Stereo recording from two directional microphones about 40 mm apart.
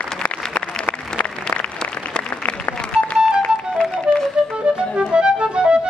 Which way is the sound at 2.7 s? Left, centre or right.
Left.